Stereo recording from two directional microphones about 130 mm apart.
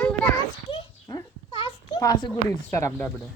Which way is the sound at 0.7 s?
25° left (ahead or behind).